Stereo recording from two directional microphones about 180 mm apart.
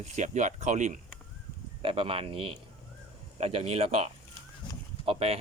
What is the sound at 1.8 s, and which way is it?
Speech, 30° right (ahead or behind).